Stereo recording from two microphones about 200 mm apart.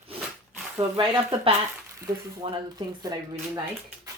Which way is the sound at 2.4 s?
25° right (ahead or behind).